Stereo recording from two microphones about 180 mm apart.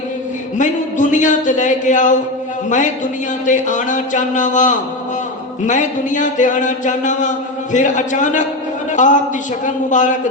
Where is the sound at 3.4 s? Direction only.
45° left (ahead or behind).